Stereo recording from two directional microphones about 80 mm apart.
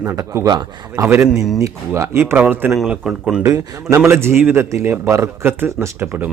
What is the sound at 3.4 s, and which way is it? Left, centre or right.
Speech, right.